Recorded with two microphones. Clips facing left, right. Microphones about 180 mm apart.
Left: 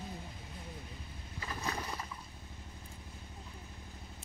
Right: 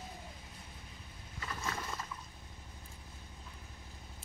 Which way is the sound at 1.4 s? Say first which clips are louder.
Left 1 dB; 25° left (ahead or behind).